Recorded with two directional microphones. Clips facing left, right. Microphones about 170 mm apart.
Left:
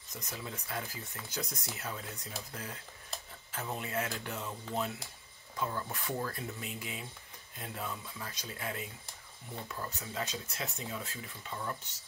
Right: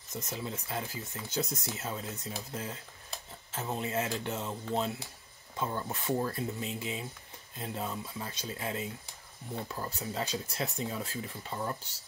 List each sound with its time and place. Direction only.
0.1 s speech: 25° right (ahead or behind)